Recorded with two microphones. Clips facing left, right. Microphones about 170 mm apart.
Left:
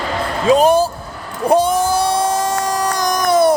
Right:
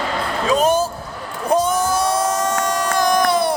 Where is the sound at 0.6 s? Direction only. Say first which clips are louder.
Left 4 dB; 35° left (ahead or behind).